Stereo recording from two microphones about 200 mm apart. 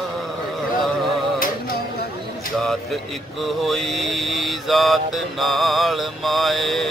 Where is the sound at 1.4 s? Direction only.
45° left (ahead or behind).